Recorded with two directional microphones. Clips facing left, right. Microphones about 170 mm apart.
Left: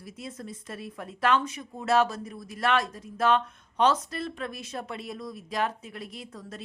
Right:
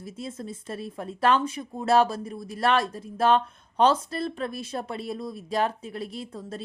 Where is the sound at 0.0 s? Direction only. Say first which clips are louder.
Right 4 dB; 25° right (ahead or behind).